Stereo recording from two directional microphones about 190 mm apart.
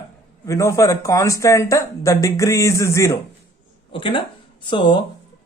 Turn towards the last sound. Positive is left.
turn(degrees=25)  # may be behind; listen again after turning